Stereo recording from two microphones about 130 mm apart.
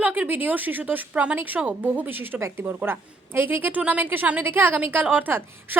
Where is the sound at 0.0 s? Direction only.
10° right (ahead or behind).